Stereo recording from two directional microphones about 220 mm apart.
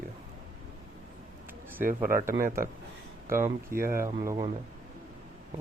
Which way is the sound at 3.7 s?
40° right (ahead or behind).